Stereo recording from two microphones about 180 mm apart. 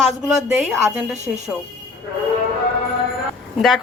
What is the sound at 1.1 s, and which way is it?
Speech, 40° right (ahead or behind).